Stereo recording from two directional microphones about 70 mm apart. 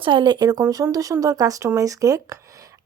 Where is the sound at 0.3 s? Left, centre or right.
Right.